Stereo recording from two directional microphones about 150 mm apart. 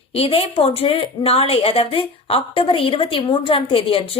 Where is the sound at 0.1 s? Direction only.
40° left (ahead or behind).